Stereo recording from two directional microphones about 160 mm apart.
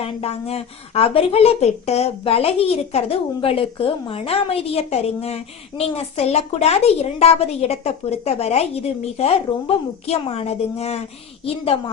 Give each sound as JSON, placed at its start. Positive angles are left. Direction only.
{"t": 0.0, "sound": "a woman's voice", "side_deg": 40}